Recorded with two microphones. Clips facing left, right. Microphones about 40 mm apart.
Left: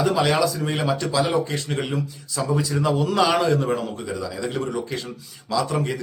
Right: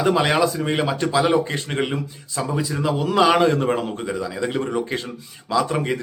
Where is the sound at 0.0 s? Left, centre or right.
Right.